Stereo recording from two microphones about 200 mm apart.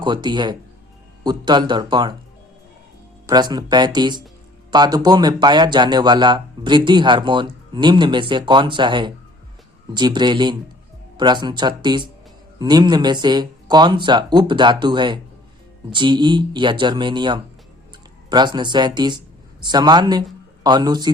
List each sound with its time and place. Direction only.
0.0 s speech: 25° right (ahead or behind)
3.2 s speech: 20° right (ahead or behind)